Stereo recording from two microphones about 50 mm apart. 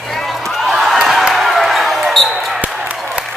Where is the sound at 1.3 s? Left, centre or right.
Centre.